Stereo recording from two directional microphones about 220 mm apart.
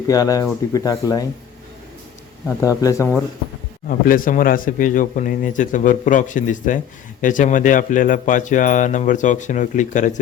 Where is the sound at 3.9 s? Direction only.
40° left (ahead or behind).